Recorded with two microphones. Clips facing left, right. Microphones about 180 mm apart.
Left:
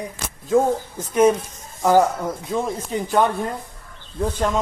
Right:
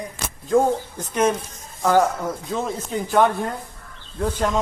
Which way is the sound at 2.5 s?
Centre (ahead or behind).